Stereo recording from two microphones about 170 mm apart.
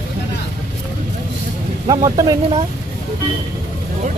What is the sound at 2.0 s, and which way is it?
Speech, 20° right (ahead or behind).